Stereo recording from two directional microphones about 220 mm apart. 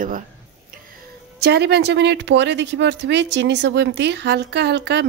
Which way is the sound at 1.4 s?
50° right (ahead or behind).